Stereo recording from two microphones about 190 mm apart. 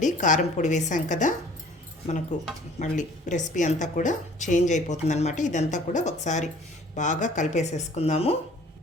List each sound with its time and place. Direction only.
0.0 s a woman's voice: 40° left (ahead or behind)
2.3 s a woman's voice: 40° left (ahead or behind)